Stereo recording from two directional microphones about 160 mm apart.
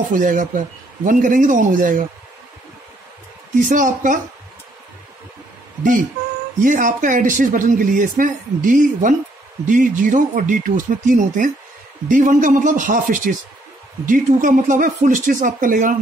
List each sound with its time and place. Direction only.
0.1 s speech: 55° right (ahead or behind)
3.5 s speech: 55° right (ahead or behind)
6.6 s speech: 55° right (ahead or behind)